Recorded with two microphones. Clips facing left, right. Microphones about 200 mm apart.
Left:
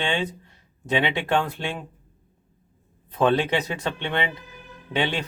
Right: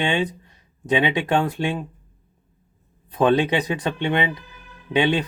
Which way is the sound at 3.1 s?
15° right (ahead or behind).